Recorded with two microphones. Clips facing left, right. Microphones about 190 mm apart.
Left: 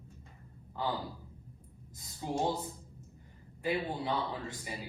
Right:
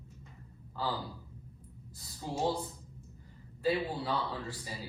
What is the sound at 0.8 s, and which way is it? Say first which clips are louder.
Speech: left 1 dB; 20° left (ahead or behind).